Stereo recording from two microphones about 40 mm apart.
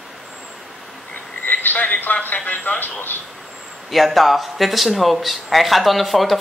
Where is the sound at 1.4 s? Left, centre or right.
Left.